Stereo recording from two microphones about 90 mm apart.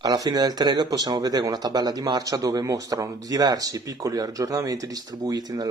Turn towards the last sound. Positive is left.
turn(degrees=-45)  # may be behind; listen again after turning